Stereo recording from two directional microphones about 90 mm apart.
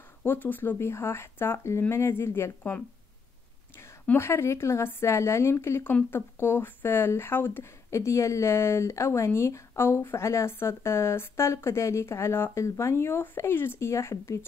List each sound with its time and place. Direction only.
0.2 s speech: 20° left (ahead or behind)
4.2 s speech: 30° left (ahead or behind)